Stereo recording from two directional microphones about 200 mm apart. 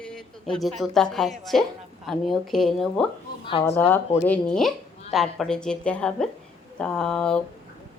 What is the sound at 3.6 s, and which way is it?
Speech, 30° left (ahead or behind).